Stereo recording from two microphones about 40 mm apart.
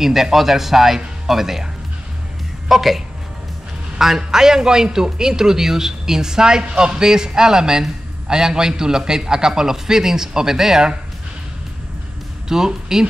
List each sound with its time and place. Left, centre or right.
0.0 s a man's voice: centre
2.7 s a woman's voice: centre
4.0 s a man's voice: centre
12.4 s speech: centre